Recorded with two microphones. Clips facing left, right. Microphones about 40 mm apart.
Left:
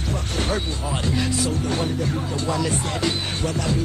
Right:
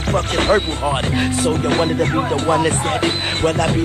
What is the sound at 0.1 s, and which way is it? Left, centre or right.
Speech, right.